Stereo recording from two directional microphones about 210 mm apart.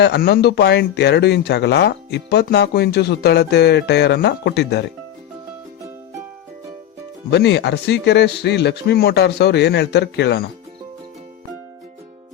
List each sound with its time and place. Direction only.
0.0 s speech: 50° left (ahead or behind)
7.3 s speech: 50° left (ahead or behind)